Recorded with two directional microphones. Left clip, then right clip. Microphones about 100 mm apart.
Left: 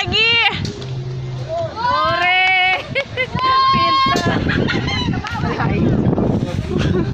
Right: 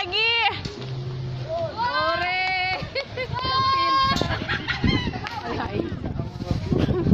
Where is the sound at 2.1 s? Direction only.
5° right (ahead or behind).